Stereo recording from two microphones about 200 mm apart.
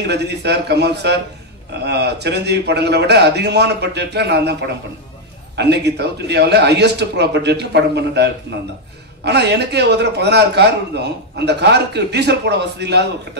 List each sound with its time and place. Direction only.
0.0 s a man's voice: 55° right (ahead or behind)